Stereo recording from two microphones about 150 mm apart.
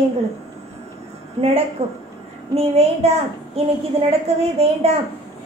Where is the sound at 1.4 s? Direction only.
45° right (ahead or behind).